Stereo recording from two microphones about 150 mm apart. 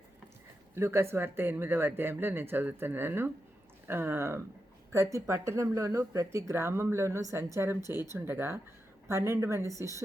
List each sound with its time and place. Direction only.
0.8 s speech: 15° right (ahead or behind)